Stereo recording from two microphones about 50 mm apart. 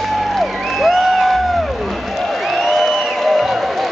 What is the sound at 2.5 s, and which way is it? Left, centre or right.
Music, centre.